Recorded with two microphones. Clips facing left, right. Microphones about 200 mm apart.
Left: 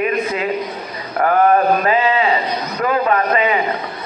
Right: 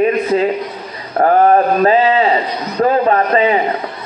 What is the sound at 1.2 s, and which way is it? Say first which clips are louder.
A man's voice: right 3 dB; 35° right (ahead or behind).